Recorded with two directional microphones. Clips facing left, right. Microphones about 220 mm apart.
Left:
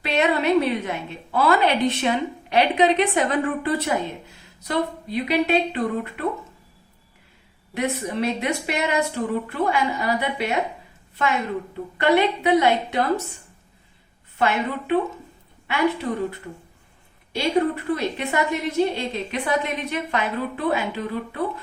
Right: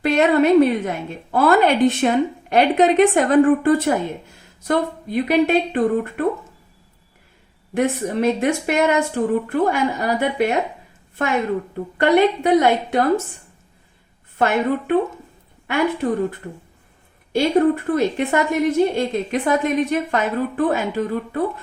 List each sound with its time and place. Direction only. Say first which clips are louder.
0.0 s a woman's voice: right 6 dB; 45° right (ahead or behind)
7.7 s a woman's voice: right 5 dB; 50° right (ahead or behind)
11.9 s a woman's voice: right 4 dB; 50° right (ahead or behind)
14.3 s a woman's voice: right 5 dB; 50° right (ahead or behind)